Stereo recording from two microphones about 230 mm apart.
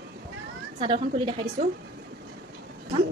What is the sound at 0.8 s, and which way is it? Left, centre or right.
Speech, right.